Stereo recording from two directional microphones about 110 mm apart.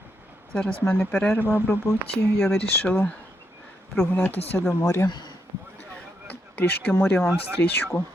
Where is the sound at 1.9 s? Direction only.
30° left (ahead or behind).